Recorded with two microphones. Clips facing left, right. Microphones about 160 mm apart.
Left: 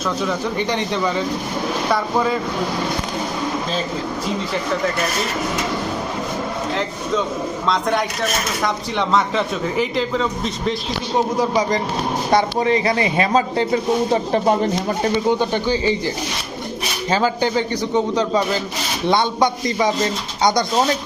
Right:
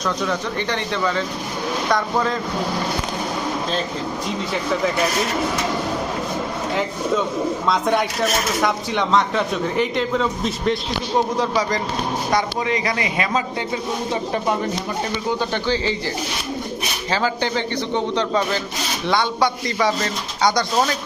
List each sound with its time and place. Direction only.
0.3 s speech: 15° left (ahead or behind)
7.7 s speech: centre (ahead or behind)
11.3 s speech: 20° left (ahead or behind)
12.3 s speech: 30° left (ahead or behind)
15.4 s speech: 15° left (ahead or behind)
17.1 s speech: 15° left (ahead or behind)
19.0 s speech: 20° left (ahead or behind)